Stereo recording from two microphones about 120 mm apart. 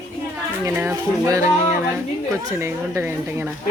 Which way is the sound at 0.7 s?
20° right (ahead or behind).